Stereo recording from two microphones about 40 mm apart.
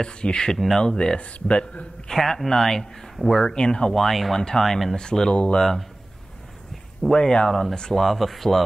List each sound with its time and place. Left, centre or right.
0.0 s speech: left
2.0 s speech: centre
3.9 s speech: centre
4.9 s speech: centre
5.3 s speech: left
5.6 s speech: centre
6.7 s a sound: centre
7.2 s speech: centre
8.0 s speech: centre